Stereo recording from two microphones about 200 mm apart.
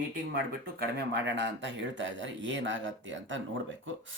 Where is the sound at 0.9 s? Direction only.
60° right (ahead or behind).